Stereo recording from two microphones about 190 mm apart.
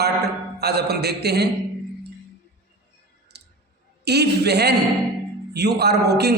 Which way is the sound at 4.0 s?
60° right (ahead or behind).